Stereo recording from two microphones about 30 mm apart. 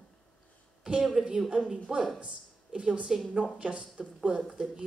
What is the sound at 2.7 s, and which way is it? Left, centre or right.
A man's voice, right.